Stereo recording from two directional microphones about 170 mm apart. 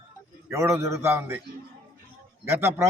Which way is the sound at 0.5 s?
15° right (ahead or behind).